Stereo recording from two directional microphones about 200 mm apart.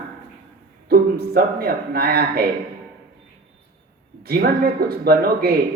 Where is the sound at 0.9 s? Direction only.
50° right (ahead or behind).